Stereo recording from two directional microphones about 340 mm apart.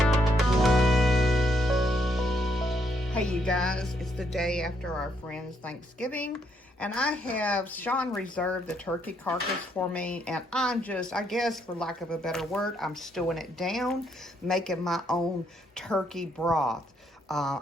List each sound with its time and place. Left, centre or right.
0.0 s music: centre
6.7 s speech: centre